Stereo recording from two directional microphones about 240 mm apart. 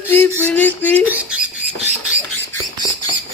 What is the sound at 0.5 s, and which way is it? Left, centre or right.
Speech, centre.